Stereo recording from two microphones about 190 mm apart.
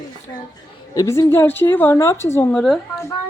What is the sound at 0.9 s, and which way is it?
A woman's voice, 20° left (ahead or behind).